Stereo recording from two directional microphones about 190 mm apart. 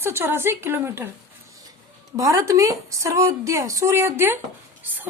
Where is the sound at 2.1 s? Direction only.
15° right (ahead or behind).